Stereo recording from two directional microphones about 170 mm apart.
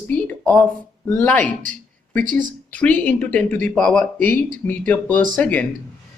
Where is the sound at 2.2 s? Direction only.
50° right (ahead or behind).